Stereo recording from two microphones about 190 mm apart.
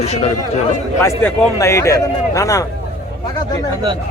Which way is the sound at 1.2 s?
15° left (ahead or behind).